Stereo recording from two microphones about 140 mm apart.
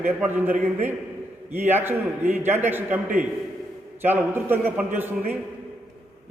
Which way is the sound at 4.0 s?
15° right (ahead or behind).